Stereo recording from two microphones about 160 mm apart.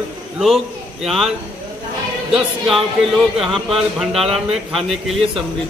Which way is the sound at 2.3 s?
Centre (ahead or behind).